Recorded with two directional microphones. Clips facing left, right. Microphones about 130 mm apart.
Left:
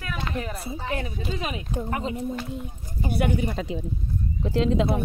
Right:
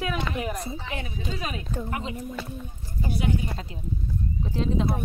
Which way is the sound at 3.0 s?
60° left (ahead or behind).